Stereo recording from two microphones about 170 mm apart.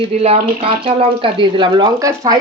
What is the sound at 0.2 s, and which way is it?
Speech, 35° right (ahead or behind).